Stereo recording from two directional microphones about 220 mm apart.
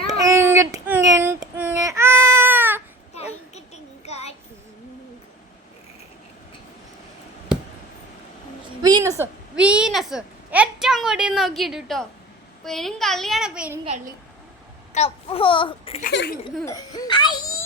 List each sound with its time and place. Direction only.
0.1 s child singing: 15° right (ahead or behind)
4.0 s a sound: 30° left (ahead or behind)
8.8 s a sound: 15° right (ahead or behind); by 12.0 s centre (ahead or behind)
12.6 s a child's voice: centre (ahead or behind)
13.8 s a woman's voice: 35° right (ahead or behind)
14.9 s a child's voice: 25° left (ahead or behind)
16.0 s speech: 45° left (ahead or behind)
16.6 s a child's voice: 15° left (ahead or behind)